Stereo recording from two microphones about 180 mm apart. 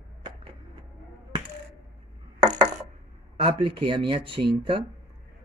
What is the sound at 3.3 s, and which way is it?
Speech, 30° right (ahead or behind).